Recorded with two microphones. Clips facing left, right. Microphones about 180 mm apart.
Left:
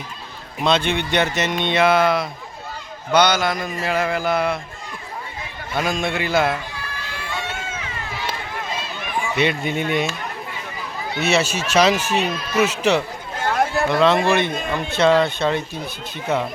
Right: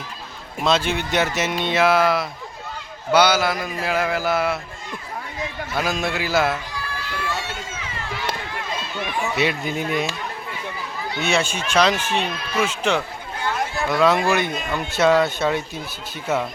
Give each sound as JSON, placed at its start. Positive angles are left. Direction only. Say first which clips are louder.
{"t": 0.6, "sound": "a man's voice", "louder": "left 1 dB", "side_deg": 0}
{"t": 5.7, "sound": "a man's voice", "louder": "left 2 dB", "side_deg": 0}
{"t": 9.4, "sound": "a man's voice", "louder": "left 3 dB", "side_deg": 0}
{"t": 11.2, "sound": "a man's voice", "louder": "left 3 dB", "side_deg": 5}
{"t": 13.4, "sound": "a sound", "louder": "left 5 dB", "side_deg": 55}
{"t": 13.8, "sound": "a man's voice", "louder": "even", "side_deg": -5}